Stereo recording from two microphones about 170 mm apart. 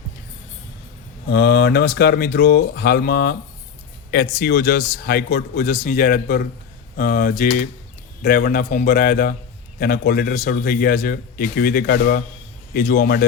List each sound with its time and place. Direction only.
1.3 s a man's voice: 75° left (ahead or behind)
12.7 s a man's voice: 55° left (ahead or behind)